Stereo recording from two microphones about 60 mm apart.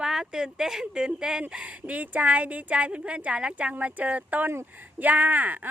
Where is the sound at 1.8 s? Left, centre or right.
Right.